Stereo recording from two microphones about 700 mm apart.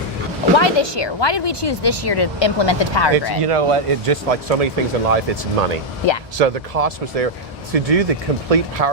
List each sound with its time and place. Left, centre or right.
0.5 s speech: left
3.4 s speech: right